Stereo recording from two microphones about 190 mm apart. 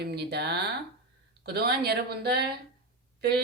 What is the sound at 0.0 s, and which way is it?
Mantra, 60° right (ahead or behind).